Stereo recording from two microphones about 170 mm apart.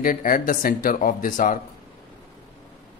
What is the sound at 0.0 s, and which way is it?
Speech, 55° left (ahead or behind).